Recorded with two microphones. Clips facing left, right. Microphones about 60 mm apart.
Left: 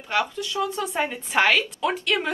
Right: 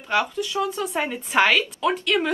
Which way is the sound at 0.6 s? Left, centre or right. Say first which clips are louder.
Right 1 dB; centre.